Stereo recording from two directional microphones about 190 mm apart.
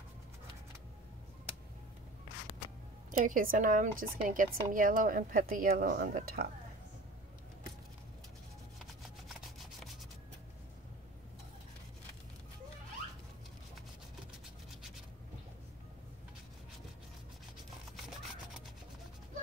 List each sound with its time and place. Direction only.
3.2 s a woman's voice: 45° right (ahead or behind)